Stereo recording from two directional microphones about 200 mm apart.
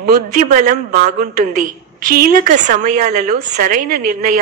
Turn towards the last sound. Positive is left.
turn(degrees=-45)  # may be behind; listen again after turning